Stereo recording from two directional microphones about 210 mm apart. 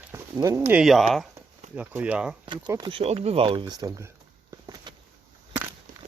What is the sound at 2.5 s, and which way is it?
Speech, 20° right (ahead or behind).